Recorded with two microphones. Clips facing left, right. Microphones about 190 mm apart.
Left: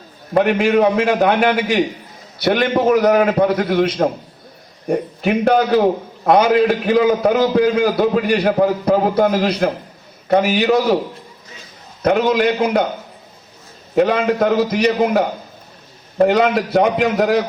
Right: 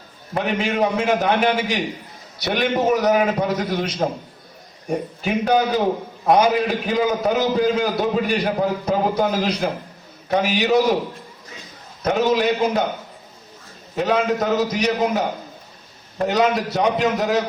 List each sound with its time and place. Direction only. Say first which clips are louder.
0.3 s a man's voice: left 7 dB; 60° left (ahead or behind)
12.0 s a man's voice: left 3 dB; 60° left (ahead or behind)
13.9 s a man's voice: left 4 dB; 60° left (ahead or behind)